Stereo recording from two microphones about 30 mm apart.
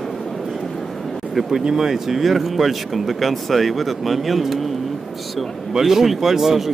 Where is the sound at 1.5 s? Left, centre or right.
Centre.